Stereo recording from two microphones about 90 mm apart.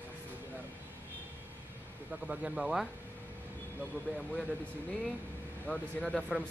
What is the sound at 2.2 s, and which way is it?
Speech, 10° right (ahead or behind).